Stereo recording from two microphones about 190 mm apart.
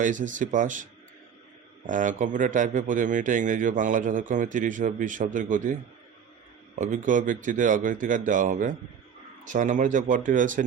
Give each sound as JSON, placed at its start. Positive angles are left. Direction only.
{"t": 0.0, "sound": "speech", "side_deg": -40}
{"t": 1.9, "sound": "speech", "side_deg": -40}
{"t": 6.7, "sound": "speech", "side_deg": -45}